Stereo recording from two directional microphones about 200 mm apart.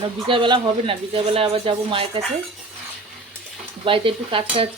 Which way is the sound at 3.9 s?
25° right (ahead or behind).